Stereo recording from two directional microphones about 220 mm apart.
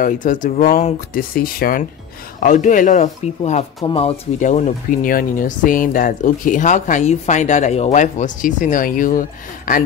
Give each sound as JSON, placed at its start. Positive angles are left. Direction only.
{"t": 0.0, "sound": "speech", "side_deg": 35}